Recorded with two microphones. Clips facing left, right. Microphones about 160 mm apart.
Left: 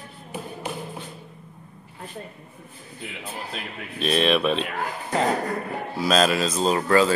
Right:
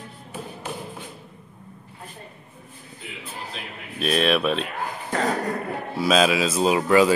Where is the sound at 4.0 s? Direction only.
5° right (ahead or behind).